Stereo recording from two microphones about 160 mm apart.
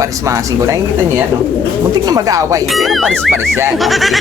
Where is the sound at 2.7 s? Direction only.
Centre (ahead or behind).